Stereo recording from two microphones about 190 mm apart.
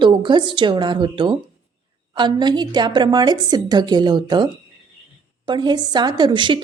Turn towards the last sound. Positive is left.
turn(degrees=-25)  # may be behind; listen again after turning